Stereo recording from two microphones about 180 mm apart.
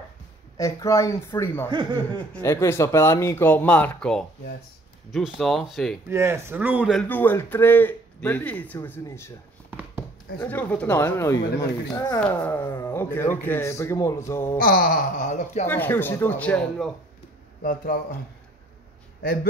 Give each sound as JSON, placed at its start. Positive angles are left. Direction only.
{"t": 0.6, "sound": "speech", "side_deg": 20}
{"t": 1.7, "sound": "speech", "side_deg": -25}
{"t": 2.3, "sound": "speech", "side_deg": 15}
{"t": 6.0, "sound": "a man's voice", "side_deg": -15}
{"t": 7.0, "sound": "speech", "side_deg": 10}
{"t": 10.4, "sound": "speech", "side_deg": 10}
{"t": 12.2, "sound": "speech", "side_deg": 10}
{"t": 14.6, "sound": "speech", "side_deg": 50}
{"t": 15.6, "sound": "speech", "side_deg": 10}
{"t": 17.6, "sound": "speech", "side_deg": 50}